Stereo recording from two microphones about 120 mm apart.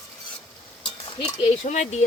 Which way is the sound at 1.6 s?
75° left (ahead or behind).